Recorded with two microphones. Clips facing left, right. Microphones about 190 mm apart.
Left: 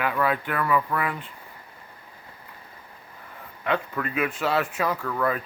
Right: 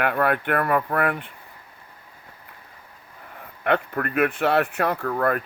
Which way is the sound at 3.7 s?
60° right (ahead or behind).